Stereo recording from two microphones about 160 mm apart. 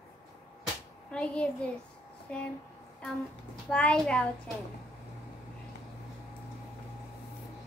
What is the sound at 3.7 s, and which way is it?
Speech, 5° left (ahead or behind).